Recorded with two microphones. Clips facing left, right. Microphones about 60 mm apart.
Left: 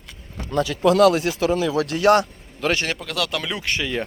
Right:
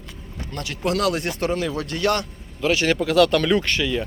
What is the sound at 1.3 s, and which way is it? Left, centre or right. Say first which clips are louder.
Speech: left 4 dB; left.